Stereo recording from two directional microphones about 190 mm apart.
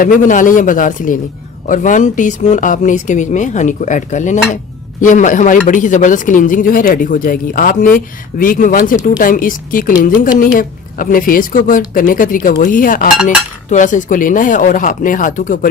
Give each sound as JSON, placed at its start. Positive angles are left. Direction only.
{"t": 0.0, "sound": "speech", "side_deg": 45}